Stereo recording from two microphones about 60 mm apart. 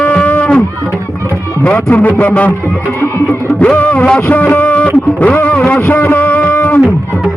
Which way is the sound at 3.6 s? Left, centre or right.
Left.